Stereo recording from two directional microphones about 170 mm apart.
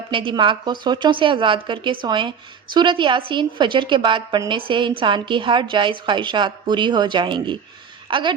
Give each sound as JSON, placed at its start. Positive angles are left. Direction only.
{"t": 0.1, "sound": "a woman's voice", "side_deg": -30}